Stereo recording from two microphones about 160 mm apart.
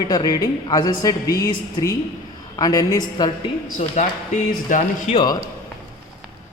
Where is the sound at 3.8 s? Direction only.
50° left (ahead or behind).